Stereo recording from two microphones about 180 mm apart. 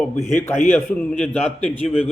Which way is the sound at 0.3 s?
10° left (ahead or behind).